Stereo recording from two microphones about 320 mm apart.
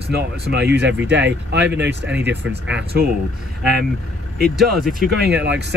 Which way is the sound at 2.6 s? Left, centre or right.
Right.